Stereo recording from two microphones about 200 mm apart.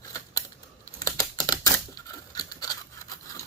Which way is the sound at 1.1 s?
15° left (ahead or behind).